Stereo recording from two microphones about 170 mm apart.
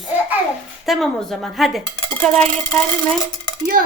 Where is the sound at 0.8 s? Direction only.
Centre (ahead or behind).